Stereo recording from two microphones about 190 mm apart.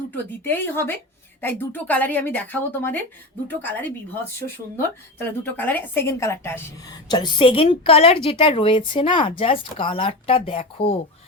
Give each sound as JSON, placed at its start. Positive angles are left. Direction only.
{"t": 0.4, "sound": "a woman's voice", "side_deg": 10}